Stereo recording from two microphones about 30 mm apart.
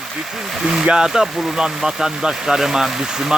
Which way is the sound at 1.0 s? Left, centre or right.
Centre.